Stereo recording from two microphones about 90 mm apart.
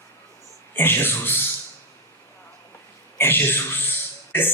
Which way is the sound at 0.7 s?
25° left (ahead or behind).